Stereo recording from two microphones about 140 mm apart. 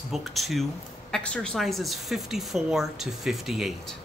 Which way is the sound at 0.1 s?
Centre (ahead or behind).